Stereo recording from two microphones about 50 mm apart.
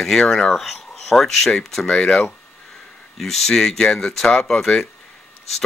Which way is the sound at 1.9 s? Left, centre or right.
Centre.